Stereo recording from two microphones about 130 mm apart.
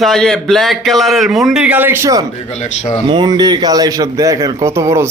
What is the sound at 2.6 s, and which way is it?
Speech, 60° left (ahead or behind).